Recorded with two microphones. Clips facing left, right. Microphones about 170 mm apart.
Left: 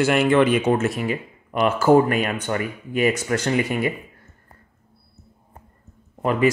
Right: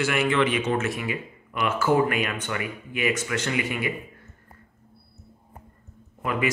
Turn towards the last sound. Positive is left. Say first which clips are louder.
# left 7 dB
turn(degrees=35)  # may be behind; listen again after turning